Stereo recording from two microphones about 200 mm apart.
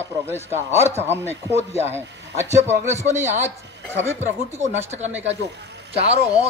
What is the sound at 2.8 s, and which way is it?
Speech, 35° right (ahead or behind).